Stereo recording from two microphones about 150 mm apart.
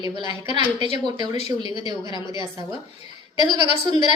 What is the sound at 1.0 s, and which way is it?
Speech, 30° right (ahead or behind).